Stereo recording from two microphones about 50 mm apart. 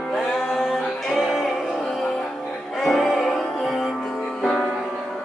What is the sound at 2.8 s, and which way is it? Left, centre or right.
Music, centre.